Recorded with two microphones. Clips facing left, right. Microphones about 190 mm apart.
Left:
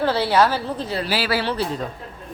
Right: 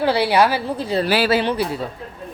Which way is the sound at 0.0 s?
15° right (ahead or behind).